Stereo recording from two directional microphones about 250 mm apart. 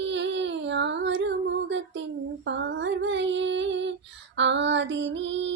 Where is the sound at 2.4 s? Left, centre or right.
Right.